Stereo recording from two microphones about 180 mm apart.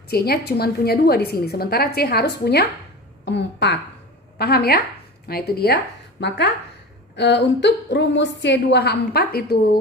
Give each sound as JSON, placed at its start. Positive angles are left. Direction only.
{"t": 0.1, "sound": "a woman's voice", "side_deg": 60}